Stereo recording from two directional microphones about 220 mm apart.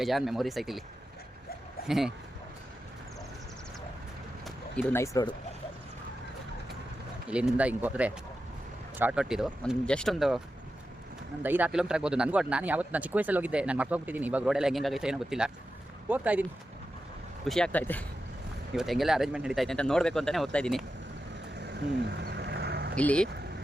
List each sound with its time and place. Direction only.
0.0 s speech: centre (ahead or behind)
1.9 s speech: centre (ahead or behind)
4.4 s speech: 10° left (ahead or behind)
7.3 s speech: 5° right (ahead or behind)
11.4 s speech: 10° right (ahead or behind)
22.2 s a sound: 50° right (ahead or behind)
23.0 s speech: 5° left (ahead or behind)